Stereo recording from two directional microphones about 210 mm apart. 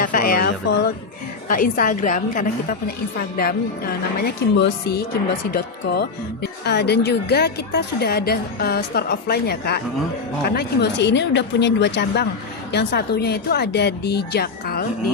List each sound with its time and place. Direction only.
0.0 s a sound: 40° left (ahead or behind)
1.5 s a woman's voice: 40° left (ahead or behind)
4.5 s a woman's voice: 55° left (ahead or behind)